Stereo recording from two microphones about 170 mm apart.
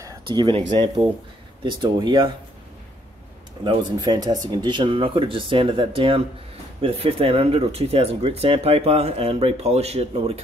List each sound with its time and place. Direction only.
0.3 s speech: 30° right (ahead or behind)
3.6 s speech: 25° right (ahead or behind)